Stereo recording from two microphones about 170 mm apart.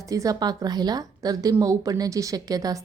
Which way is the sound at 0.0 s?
20° right (ahead or behind).